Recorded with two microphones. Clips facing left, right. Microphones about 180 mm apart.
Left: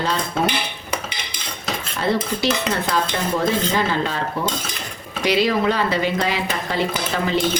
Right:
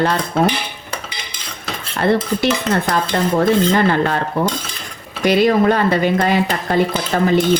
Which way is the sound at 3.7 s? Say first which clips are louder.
Right 6 dB; 60° right (ahead or behind).